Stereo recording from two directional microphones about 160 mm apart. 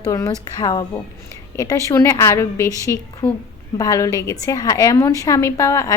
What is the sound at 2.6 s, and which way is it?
Speech, 20° right (ahead or behind).